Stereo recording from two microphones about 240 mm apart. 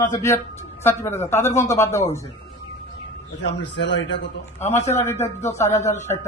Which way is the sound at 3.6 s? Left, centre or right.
Left.